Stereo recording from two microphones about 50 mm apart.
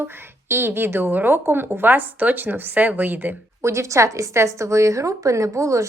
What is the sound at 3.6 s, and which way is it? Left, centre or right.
A woman's voice, right.